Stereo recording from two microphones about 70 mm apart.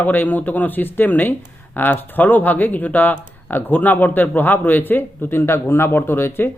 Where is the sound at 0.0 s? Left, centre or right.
Left.